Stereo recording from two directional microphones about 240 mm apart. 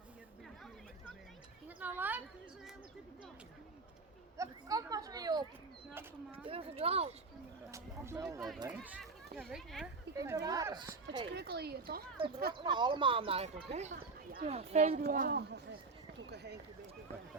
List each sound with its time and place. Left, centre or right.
1.6 s a sound: centre
4.4 s a sound: centre
6.3 s speech: right
7.7 s a sound: centre
8.5 s speech: centre
10.2 s speech: centre
11.3 s speech: right
12.5 s speech: centre
15.0 s speech: right